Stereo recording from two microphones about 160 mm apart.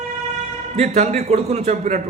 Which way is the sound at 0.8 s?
45° right (ahead or behind).